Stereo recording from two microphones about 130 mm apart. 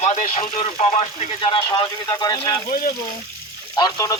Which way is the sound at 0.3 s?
50° left (ahead or behind).